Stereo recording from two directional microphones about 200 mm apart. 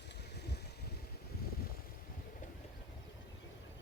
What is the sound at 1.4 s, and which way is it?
Vehicle, 50° left (ahead or behind).